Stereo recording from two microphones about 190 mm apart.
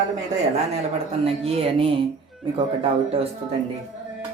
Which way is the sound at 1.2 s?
30° right (ahead or behind).